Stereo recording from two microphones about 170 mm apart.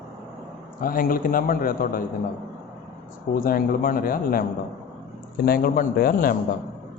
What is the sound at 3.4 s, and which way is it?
Speech, 60° left (ahead or behind).